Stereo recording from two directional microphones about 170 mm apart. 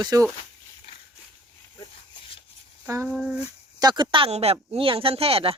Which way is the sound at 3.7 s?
25° right (ahead or behind).